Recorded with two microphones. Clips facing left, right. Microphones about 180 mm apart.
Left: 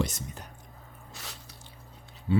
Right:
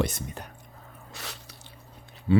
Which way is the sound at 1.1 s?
70° right (ahead or behind).